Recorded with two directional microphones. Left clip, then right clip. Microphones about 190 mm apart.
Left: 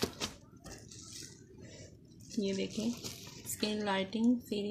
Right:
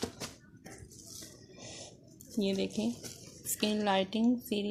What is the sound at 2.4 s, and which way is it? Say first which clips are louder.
A woman's voice: right 3 dB; 35° right (ahead or behind).